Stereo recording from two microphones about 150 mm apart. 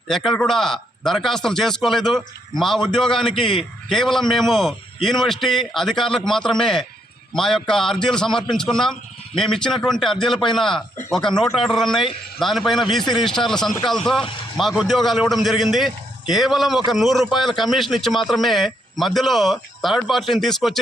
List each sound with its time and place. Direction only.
0.1 s a man's voice: 5° left (ahead or behind)